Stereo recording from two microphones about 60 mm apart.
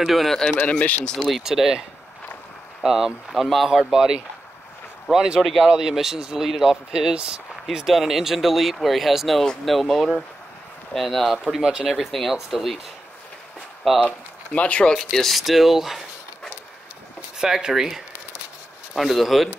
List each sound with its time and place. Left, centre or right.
0.0 s speech: centre
0.5 s speech: left
1.3 s speech: centre
7.7 s speech: centre
14.0 s speech: left
15.0 s speech: centre
17.4 s speech: centre